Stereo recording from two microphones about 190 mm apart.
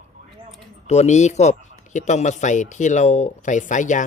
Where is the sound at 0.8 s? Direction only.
35° left (ahead or behind).